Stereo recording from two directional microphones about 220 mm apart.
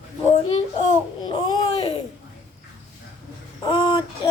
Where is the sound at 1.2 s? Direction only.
20° left (ahead or behind).